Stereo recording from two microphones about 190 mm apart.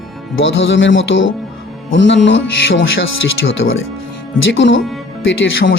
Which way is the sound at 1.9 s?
70° left (ahead or behind).